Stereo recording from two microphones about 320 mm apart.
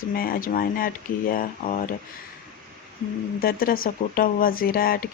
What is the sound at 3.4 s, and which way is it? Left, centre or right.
Speech, left.